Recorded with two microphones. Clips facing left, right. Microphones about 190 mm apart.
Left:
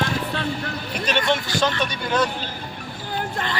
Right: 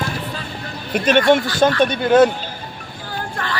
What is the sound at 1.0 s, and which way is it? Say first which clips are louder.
Speech: right 9 dB; 50° right (ahead or behind).